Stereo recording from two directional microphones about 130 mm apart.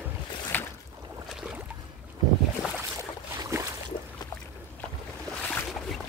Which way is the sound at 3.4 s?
20° right (ahead or behind).